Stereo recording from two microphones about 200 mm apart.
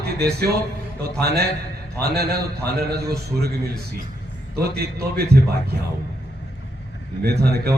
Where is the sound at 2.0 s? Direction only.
50° right (ahead or behind).